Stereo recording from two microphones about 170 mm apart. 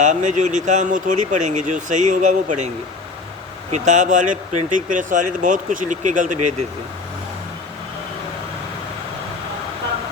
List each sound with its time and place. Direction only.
0.0 s speech: 45° right (ahead or behind)
3.7 s speech: 45° right (ahead or behind)